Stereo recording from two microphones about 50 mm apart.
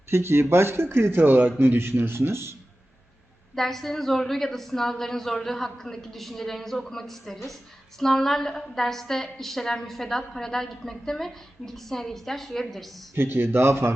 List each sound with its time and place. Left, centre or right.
0.1 s speech: right
1.2 s speech: right
3.5 s a woman's voice: centre
13.1 s speech: right